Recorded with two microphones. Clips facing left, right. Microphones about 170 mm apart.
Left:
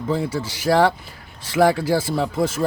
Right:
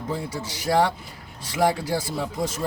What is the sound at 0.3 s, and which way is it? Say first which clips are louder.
Speech: left 2 dB; 70° left (ahead or behind).